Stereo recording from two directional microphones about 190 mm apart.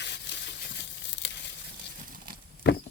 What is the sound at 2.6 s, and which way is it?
Walk, 65° left (ahead or behind).